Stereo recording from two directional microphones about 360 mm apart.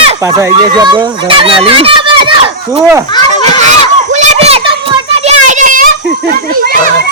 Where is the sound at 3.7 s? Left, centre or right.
Centre.